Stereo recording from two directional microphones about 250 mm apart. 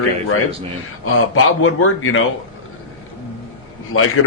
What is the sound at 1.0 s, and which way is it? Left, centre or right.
Speech, left.